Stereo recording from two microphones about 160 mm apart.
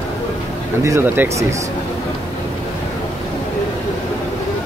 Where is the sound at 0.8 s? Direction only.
15° right (ahead or behind).